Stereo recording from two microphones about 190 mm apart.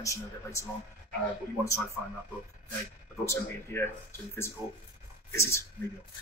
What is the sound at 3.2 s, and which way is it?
A man's voice, 15° left (ahead or behind).